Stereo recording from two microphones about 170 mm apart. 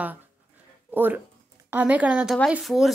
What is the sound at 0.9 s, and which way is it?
A woman's voice, 10° right (ahead or behind).